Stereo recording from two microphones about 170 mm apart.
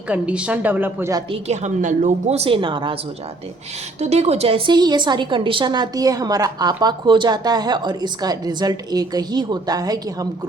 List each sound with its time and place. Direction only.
0.1 s a woman's voice: 5° right (ahead or behind)
1.3 s a woman's voice: 40° right (ahead or behind)
4.0 s a woman's voice: 40° right (ahead or behind); by 10.2 s 20° right (ahead or behind)